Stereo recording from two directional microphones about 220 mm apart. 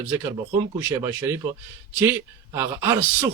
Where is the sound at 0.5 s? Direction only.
10° right (ahead or behind).